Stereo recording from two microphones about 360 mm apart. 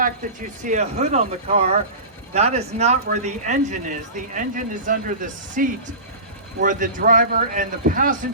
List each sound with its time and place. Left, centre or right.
0.6 s speech: centre